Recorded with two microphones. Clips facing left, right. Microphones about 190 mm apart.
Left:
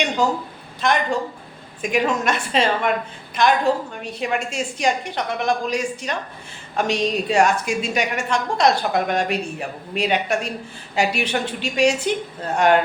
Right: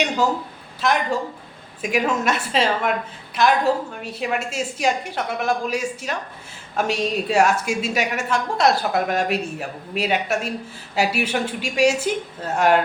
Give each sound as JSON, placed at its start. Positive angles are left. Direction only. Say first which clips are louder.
{"t": 0.8, "sound": "a woman's voice", "louder": "left 1 dB", "side_deg": -5}